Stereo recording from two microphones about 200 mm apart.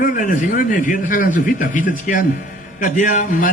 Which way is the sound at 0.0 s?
40° left (ahead or behind).